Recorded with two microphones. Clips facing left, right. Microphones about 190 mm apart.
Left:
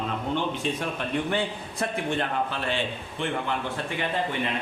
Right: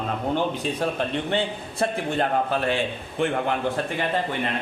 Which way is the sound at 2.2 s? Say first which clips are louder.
Right 5 dB; 45° right (ahead or behind).